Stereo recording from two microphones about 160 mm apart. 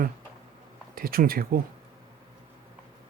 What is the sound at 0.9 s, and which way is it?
Speech, 65° right (ahead or behind).